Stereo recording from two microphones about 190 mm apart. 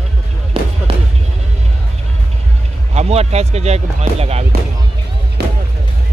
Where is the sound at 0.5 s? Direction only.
30° right (ahead or behind).